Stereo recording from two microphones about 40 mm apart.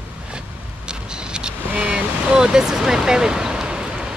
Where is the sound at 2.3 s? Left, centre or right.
Centre.